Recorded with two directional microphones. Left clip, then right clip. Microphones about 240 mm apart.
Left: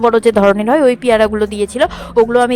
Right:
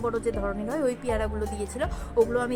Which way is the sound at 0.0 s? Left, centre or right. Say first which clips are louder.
Left 18 dB; left.